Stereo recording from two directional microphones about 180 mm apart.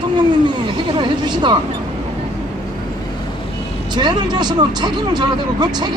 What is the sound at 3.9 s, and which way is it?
Speech, 25° right (ahead or behind).